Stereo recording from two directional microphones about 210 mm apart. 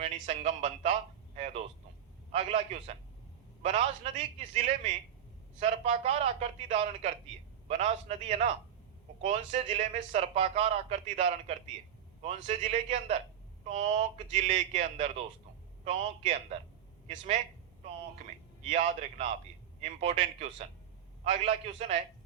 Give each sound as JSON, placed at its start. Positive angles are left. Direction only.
{"t": 0.0, "sound": "a man's voice", "side_deg": -30}
{"t": 18.7, "sound": "speech", "side_deg": -30}